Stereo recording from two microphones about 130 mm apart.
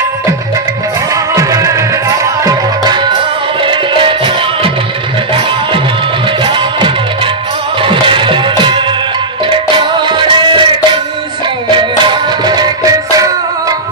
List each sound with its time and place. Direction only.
1.1 s music: 25° right (ahead or behind); by 4.7 s 40° right (ahead or behind)
6.4 s music: 40° right (ahead or behind)